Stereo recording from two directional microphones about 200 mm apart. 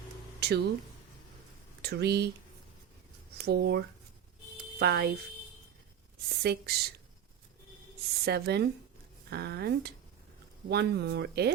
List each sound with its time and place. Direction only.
0.3 s music: 55° right (ahead or behind)
1.8 s speech: 55° right (ahead or behind)
3.3 s speech: 55° right (ahead or behind)
6.2 s speech: 50° right (ahead or behind)
8.2 s speech: 55° right (ahead or behind)